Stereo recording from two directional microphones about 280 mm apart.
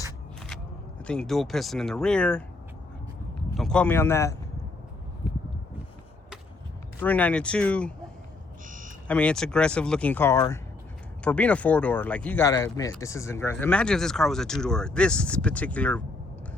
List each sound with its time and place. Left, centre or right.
1.0 s speech: centre
3.5 s a man's voice: centre
7.0 s speech: centre
8.6 s a sound: right
9.0 s speech: centre